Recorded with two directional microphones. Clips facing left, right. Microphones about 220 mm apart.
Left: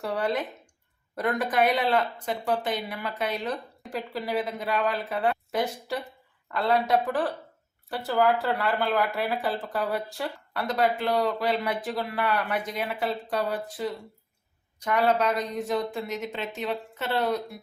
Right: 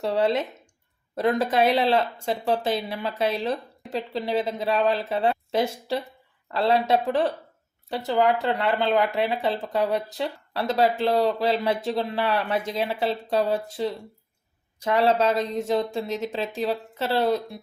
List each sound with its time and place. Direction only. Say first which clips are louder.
0.0 s speech: right 5 dB; 25° right (ahead or behind)